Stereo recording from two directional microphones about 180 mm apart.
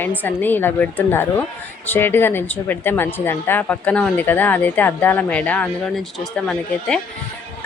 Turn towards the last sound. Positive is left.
turn(degrees=5)  # may be behind; listen again after turning